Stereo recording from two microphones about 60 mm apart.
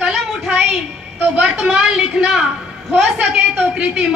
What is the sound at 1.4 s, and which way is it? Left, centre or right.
A woman's voice, centre.